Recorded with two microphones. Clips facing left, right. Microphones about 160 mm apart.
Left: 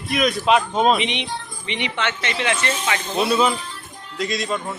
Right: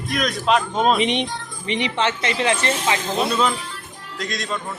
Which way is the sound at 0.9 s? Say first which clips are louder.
Right 4 dB; 45° right (ahead or behind).